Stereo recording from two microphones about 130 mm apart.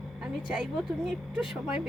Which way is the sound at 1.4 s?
5° right (ahead or behind).